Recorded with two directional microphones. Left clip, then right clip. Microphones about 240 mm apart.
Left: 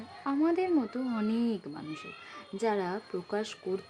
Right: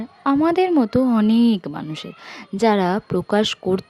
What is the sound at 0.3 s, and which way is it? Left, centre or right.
Speech, right.